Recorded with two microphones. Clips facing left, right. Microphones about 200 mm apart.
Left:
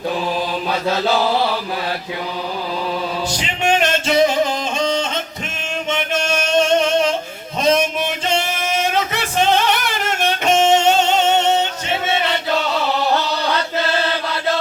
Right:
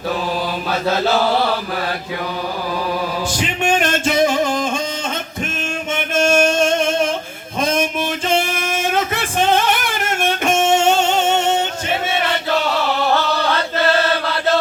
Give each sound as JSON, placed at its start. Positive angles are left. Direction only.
{"t": 3.3, "sound": "music", "side_deg": -50}
{"t": 5.9, "sound": "music", "side_deg": -50}
{"t": 7.6, "sound": "a sound", "side_deg": -50}